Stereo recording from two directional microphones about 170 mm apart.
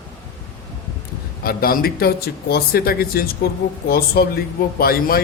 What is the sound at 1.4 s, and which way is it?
Speech, 60° left (ahead or behind).